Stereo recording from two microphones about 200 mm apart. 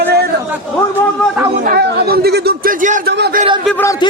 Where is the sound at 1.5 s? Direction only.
45° right (ahead or behind).